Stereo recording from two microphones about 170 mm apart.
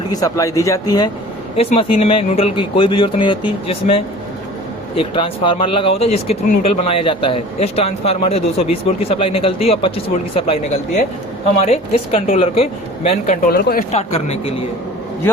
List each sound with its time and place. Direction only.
0.1 s speech: 20° left (ahead or behind)
1.5 s speech: 35° left (ahead or behind); by 13.8 s 60° left (ahead or behind)
13.9 s speech: 40° left (ahead or behind)